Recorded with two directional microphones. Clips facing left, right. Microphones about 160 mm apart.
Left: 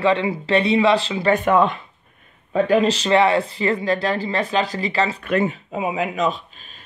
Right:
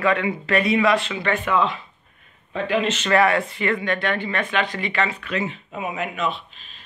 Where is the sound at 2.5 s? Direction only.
40° left (ahead or behind).